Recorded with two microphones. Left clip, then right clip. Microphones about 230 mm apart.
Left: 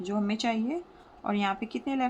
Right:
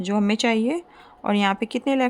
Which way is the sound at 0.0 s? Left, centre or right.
Right.